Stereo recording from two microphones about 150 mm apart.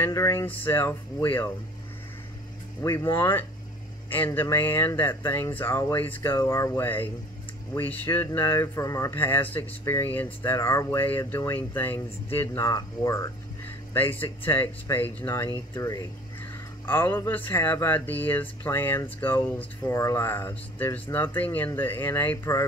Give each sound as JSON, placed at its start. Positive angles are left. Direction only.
{"t": 0.0, "sound": "speech", "side_deg": 20}
{"t": 2.8, "sound": "speech", "side_deg": 15}